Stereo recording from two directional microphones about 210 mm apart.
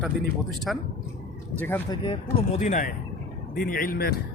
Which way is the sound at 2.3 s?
35° left (ahead or behind).